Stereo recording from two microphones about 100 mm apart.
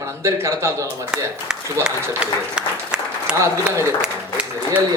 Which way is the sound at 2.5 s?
10° right (ahead or behind).